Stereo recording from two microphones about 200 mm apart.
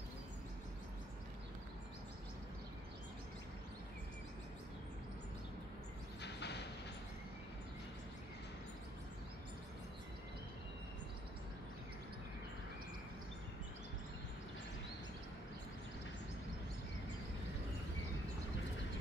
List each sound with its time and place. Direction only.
6.2 s vehicle: 55° left (ahead or behind)